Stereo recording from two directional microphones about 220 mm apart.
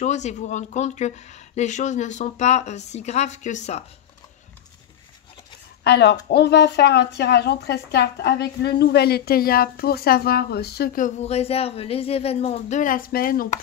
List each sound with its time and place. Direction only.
0.0 s speech: 30° left (ahead or behind)
5.9 s speech: 50° left (ahead or behind)